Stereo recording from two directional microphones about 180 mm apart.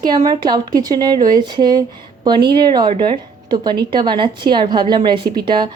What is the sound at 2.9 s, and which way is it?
A woman's voice, 25° right (ahead or behind).